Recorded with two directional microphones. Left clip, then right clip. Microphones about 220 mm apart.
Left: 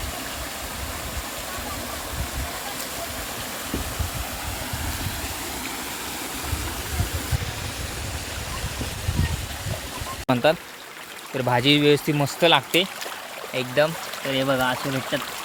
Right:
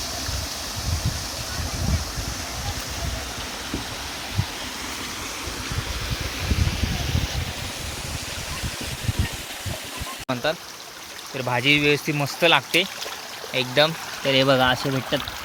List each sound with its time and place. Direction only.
10.2 s speech: 30° left (ahead or behind)
11.3 s speech: 20° left (ahead or behind)
13.5 s speech: 10° right (ahead or behind)
14.3 s speech: 25° right (ahead or behind)